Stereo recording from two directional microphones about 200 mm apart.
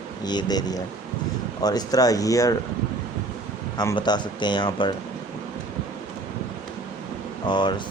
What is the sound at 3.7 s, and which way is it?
Speech, 20° left (ahead or behind).